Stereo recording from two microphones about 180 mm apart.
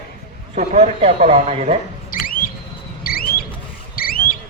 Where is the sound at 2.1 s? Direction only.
50° left (ahead or behind).